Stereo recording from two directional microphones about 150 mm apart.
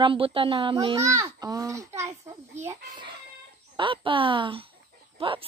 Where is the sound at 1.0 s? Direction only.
20° right (ahead or behind).